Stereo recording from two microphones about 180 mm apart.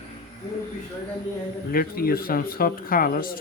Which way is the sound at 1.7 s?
55° left (ahead or behind).